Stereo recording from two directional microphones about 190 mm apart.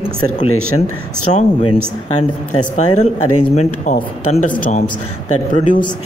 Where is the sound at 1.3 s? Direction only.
30° left (ahead or behind).